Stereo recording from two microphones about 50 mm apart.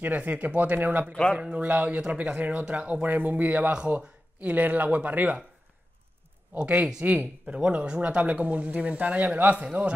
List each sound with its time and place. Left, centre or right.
0.0 s speech: right
6.5 s speech: right